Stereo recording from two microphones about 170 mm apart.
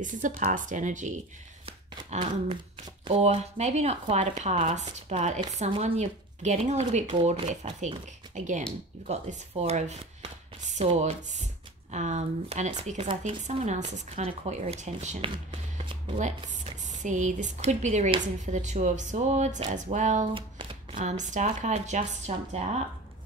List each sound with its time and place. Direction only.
0.0 s speech: 50° right (ahead or behind)
11.9 s speech: 45° right (ahead or behind)
16.9 s speech: 45° right (ahead or behind)